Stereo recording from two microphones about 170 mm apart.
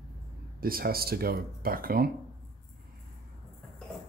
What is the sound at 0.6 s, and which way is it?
Speech, 60° right (ahead or behind).